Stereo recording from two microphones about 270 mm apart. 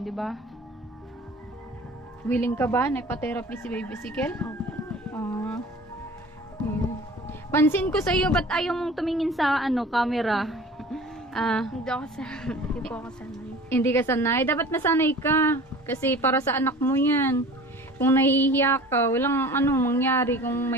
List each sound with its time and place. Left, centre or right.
0.0 s a woman's voice: centre
2.2 s a woman's voice: centre
7.2 s a woman's voice: centre